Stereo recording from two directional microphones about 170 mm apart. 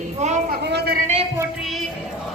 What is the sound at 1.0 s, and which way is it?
Speech, 40° right (ahead or behind).